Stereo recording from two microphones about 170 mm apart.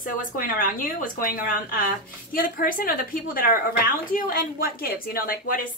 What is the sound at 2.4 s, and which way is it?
A woman's voice, 55° left (ahead or behind).